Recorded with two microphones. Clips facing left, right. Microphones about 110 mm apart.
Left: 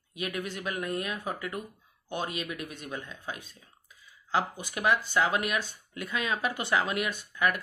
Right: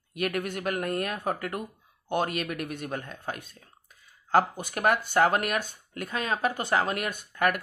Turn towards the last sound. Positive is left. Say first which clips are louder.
# right 2 dB
turn(degrees=-55)  # may be behind; listen again after turning